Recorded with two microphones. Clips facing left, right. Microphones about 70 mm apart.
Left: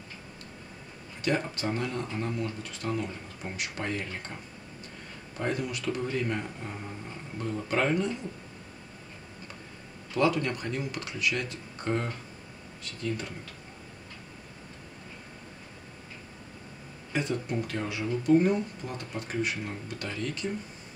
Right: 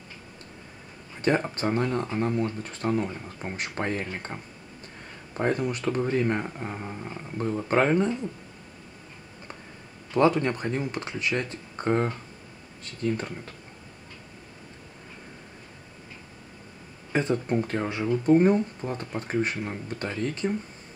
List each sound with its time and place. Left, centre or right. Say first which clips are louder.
1.2 s speech: right 5 dB; right
5.4 s speech: right 5 dB; right
10.1 s speech: right 5 dB; right
17.1 s speech: right 5 dB; right